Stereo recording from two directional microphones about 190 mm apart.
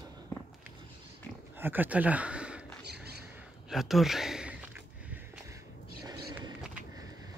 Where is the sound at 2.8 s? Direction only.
60° right (ahead or behind).